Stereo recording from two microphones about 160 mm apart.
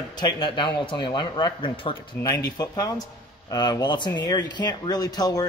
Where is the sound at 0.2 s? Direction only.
30° left (ahead or behind).